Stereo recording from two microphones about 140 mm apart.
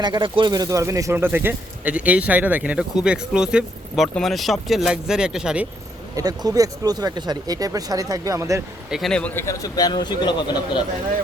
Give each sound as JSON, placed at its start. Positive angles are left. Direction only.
{"t": 0.0, "sound": "speech", "side_deg": -35}
{"t": 6.1, "sound": "speech", "side_deg": -25}
{"t": 8.9, "sound": "a man's voice", "side_deg": 0}